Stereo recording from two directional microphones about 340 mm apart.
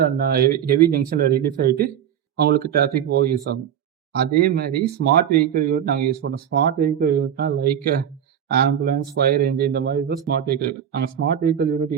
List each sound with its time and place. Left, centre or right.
0.0 s speech: right